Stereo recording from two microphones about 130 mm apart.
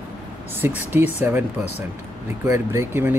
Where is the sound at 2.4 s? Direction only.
20° right (ahead or behind).